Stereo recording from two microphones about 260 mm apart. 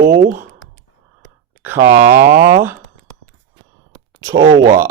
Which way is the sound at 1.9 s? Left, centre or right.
Centre.